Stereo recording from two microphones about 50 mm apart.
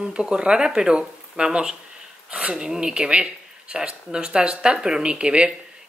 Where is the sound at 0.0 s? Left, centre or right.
Centre.